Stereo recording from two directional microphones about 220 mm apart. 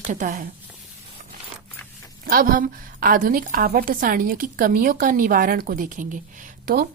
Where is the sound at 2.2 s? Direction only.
40° right (ahead or behind).